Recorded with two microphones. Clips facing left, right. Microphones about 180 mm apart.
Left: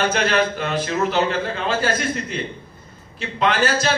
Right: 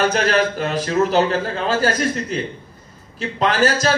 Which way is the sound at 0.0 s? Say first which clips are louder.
Right 2 dB; 40° right (ahead or behind).